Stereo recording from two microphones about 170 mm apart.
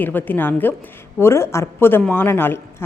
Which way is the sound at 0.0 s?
10° left (ahead or behind).